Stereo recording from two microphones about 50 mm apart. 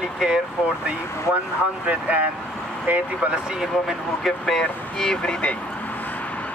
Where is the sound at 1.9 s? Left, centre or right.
Right.